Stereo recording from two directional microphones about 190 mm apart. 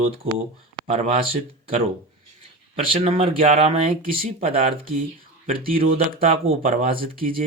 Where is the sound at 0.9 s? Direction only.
35° right (ahead or behind).